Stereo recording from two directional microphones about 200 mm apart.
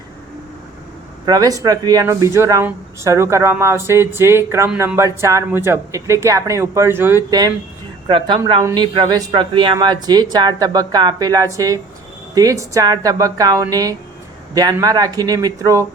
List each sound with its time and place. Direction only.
1.2 s speech: 20° right (ahead or behind)